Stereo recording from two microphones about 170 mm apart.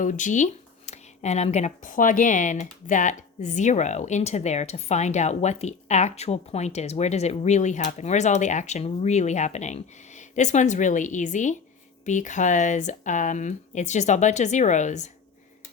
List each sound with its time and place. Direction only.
0.0 s speech: 45° left (ahead or behind)